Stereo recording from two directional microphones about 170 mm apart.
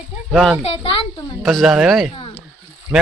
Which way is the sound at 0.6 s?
30° left (ahead or behind).